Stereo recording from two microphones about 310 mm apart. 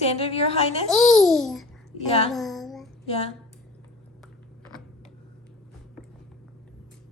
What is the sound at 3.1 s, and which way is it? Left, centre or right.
Speech, centre.